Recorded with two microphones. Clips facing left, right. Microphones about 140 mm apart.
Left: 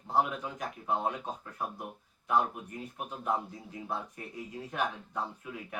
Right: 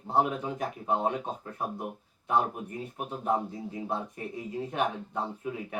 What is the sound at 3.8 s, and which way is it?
Speech, 25° right (ahead or behind).